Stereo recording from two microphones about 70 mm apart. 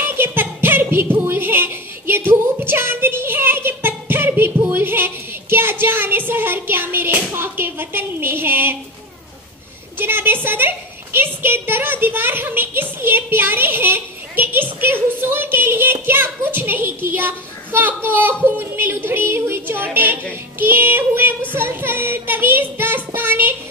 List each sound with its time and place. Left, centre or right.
0.0 s music: right
9.9 s a child's voice: right
20.5 s child singing: right